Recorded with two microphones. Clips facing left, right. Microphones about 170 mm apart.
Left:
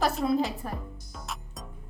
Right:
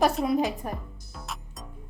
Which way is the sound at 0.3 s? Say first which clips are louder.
Right 1 dB; 15° right (ahead or behind).